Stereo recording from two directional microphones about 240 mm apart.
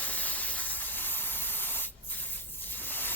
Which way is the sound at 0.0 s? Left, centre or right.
Centre.